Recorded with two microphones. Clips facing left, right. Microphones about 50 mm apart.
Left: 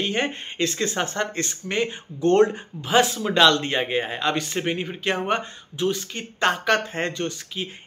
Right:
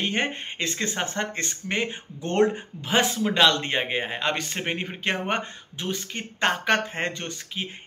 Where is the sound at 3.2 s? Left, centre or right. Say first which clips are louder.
Left 3 dB; centre.